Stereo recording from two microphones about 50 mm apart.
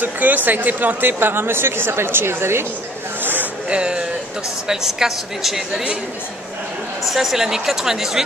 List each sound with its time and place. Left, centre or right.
0.0 s speech: right
3.6 s speech: right
4.6 s a woman's voice: centre
7.1 s a woman's voice: centre